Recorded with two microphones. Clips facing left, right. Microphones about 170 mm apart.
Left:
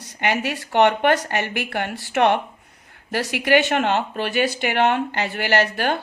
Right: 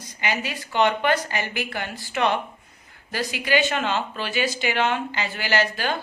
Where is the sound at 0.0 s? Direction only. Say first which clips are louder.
Left 5 dB; 65° left (ahead or behind).